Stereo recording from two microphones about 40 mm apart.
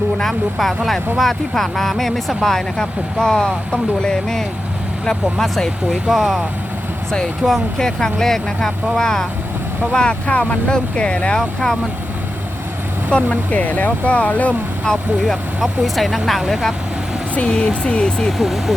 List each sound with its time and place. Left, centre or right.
0.2 s speech: centre
7.4 s speech: centre
10.2 s speech: left; by 11.8 s centre
13.1 s speech: left
14.0 s speech: left
14.9 s speech: left
15.3 s speech: centre
17.4 s speech: left
18.3 s speech: centre